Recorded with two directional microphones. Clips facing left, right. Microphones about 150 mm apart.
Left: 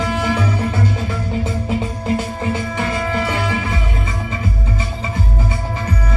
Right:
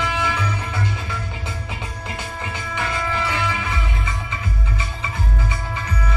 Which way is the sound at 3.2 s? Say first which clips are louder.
Left 4 dB; 35° left (ahead or behind).